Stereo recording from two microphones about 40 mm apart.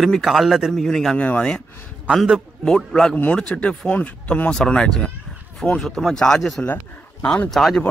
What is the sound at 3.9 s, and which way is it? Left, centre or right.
Speech, left.